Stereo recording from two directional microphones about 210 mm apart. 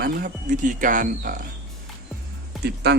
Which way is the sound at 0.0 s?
40° right (ahead or behind).